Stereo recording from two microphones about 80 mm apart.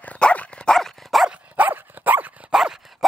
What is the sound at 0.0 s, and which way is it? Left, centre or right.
Dog, centre.